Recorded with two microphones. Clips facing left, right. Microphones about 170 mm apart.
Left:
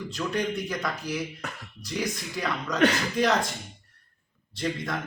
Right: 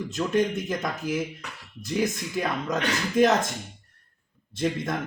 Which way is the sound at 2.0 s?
20° right (ahead or behind).